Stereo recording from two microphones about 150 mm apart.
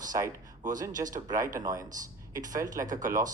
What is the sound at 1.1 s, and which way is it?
Speech, 25° right (ahead or behind).